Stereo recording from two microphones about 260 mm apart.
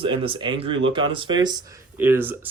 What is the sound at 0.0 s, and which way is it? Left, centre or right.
Speech, centre.